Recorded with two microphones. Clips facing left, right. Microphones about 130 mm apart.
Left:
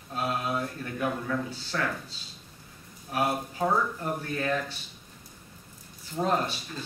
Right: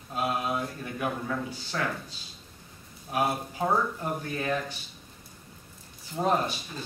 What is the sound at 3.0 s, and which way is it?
A man's voice, 10° right (ahead or behind).